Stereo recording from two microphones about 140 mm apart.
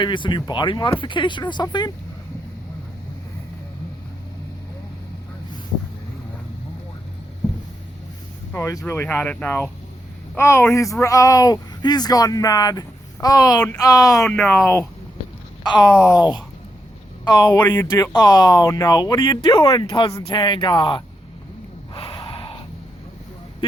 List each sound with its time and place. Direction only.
0.0 s speech: 35° left (ahead or behind)
8.5 s speech: 20° left (ahead or behind)
14.3 s speech: 10° left (ahead or behind)
15.6 s speech: 30° left (ahead or behind)
17.2 s speech: 30° left (ahead or behind)
21.9 s snort: 40° left (ahead or behind)